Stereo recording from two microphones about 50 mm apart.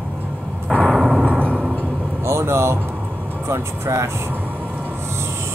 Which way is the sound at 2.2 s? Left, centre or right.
Right.